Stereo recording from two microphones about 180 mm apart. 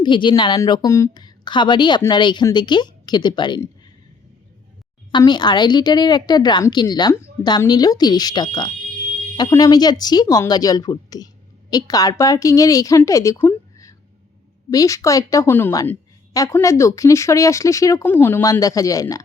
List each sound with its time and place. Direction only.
0.0 s a woman's voice: 25° left (ahead or behind)
5.1 s a woman's voice: 25° left (ahead or behind)